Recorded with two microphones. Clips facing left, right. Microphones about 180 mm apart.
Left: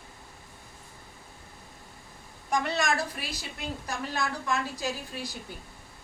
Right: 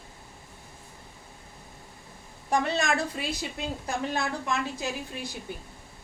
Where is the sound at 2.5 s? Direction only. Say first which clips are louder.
Right 2 dB; 20° right (ahead or behind).